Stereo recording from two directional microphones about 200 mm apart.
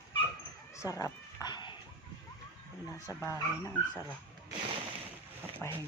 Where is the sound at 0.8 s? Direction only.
15° left (ahead or behind).